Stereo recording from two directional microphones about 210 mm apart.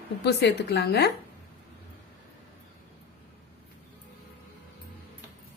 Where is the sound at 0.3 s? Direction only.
50° left (ahead or behind).